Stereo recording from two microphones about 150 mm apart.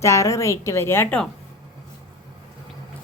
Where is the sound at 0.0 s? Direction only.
20° left (ahead or behind).